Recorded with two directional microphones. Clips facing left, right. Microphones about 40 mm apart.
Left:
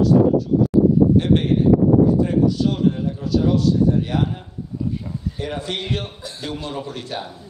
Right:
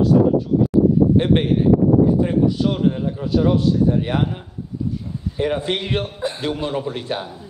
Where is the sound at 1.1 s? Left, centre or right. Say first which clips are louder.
Even; right.